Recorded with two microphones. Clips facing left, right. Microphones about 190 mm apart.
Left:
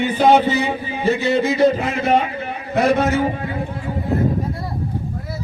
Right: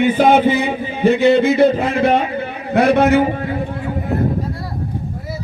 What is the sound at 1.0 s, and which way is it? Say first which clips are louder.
Speech: right 6 dB; 60° right (ahead or behind).